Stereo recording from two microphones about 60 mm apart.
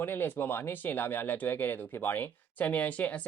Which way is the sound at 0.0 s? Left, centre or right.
Left.